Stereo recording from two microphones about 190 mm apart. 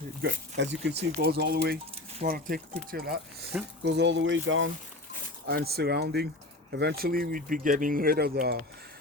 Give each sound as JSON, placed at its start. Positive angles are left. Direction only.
{"t": 0.2, "sound": "speech", "side_deg": -65}
{"t": 1.2, "sound": "speech", "side_deg": -55}
{"t": 3.8, "sound": "speech", "side_deg": -65}
{"t": 5.5, "sound": "speech", "side_deg": -55}